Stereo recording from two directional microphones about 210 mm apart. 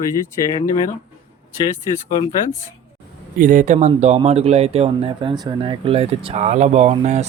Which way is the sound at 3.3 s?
40° right (ahead or behind).